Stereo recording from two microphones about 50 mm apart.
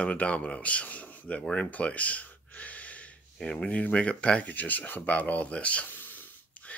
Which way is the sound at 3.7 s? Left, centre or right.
Left.